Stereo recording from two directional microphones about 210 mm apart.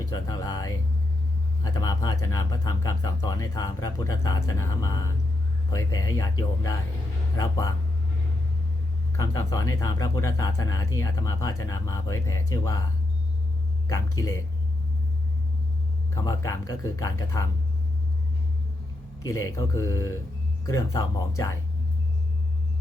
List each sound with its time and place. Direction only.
0.1 s speech: 15° left (ahead or behind)
9.1 s speech: 15° left (ahead or behind)
13.8 s speech: 15° left (ahead or behind)
16.1 s speech: 15° left (ahead or behind)
19.2 s speech: 15° left (ahead or behind)